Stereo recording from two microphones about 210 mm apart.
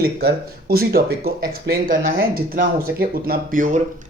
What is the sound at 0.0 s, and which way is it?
Speech, 50° right (ahead or behind).